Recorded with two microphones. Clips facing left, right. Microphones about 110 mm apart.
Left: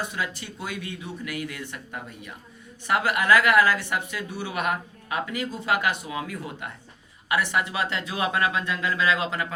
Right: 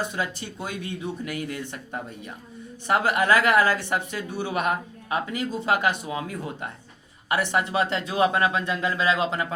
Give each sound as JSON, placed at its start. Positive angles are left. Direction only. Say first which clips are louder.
{"t": 0.0, "sound": "speech", "louder": "right 2 dB", "side_deg": -25}